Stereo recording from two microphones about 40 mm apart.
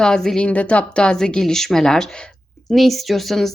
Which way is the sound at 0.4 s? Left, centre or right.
Left.